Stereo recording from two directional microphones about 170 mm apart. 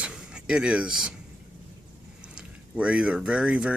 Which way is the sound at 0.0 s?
5° right (ahead or behind).